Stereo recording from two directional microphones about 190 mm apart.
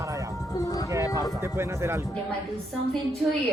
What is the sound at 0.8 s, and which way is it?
Speech, 15° right (ahead or behind).